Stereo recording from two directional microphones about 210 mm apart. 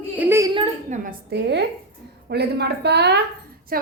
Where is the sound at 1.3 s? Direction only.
55° right (ahead or behind).